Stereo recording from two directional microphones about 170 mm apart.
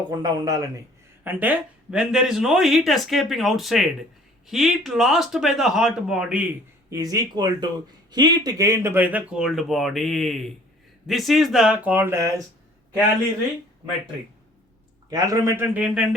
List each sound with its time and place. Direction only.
0.1 s speech: 25° right (ahead or behind)
1.2 s speech: 10° right (ahead or behind)
6.9 s speech: 20° right (ahead or behind)
15.1 s a man's voice: 20° right (ahead or behind)